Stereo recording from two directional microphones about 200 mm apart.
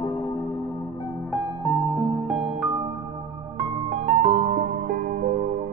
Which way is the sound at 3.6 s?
30° right (ahead or behind).